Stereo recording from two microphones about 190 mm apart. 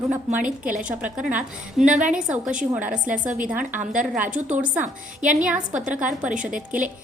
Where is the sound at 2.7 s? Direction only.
5° right (ahead or behind).